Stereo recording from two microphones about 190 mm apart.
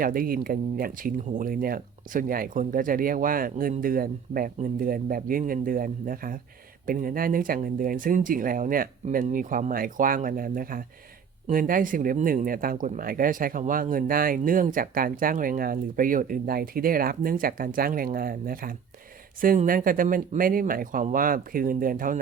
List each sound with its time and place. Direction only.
0.0 s speech: 50° right (ahead or behind)